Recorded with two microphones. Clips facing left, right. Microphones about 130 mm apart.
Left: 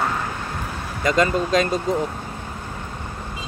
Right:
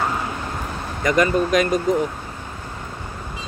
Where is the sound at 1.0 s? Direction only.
25° left (ahead or behind).